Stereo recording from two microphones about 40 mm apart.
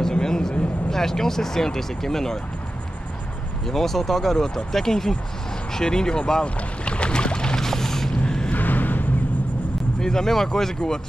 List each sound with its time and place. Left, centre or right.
0.0 s a sound: centre
0.8 s speech: centre
3.6 s speech: centre
6.8 s boat: left; by 8.1 s centre
8.5 s a sound: left
9.9 s speech: centre